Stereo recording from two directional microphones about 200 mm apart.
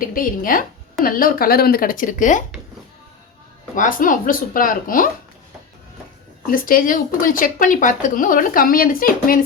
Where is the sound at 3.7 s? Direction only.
40° left (ahead or behind).